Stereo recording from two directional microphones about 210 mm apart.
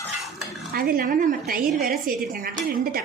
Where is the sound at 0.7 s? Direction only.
45° right (ahead or behind).